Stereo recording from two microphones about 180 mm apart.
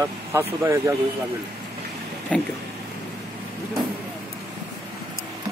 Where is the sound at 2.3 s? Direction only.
5° left (ahead or behind).